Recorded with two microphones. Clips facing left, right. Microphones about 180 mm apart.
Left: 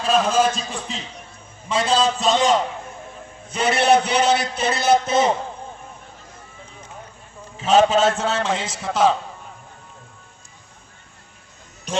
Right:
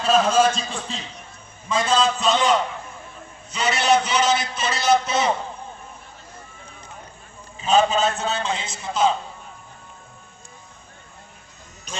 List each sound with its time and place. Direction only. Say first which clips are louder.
0.0 s a man's voice: right 1 dB; centre (ahead or behind)
0.4 s a man's voice: right 1 dB; 15° left (ahead or behind)
1.7 s a man's voice: left 1 dB; 35° left (ahead or behind)
3.5 s a man's voice: left 3 dB; 55° left (ahead or behind)
7.5 s a man's voice: left 3 dB; 85° left
11.9 s music: left 10 dB; 80° left